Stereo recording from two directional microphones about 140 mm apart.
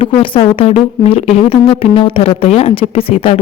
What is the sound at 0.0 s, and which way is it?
Speech, 40° left (ahead or behind).